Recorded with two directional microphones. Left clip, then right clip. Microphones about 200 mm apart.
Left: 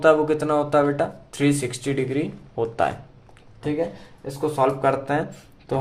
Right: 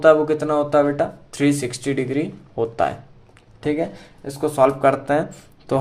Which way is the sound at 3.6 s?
35° right (ahead or behind).